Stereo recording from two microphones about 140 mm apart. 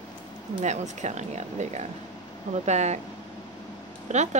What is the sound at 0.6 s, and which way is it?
A woman's voice, 55° right (ahead or behind).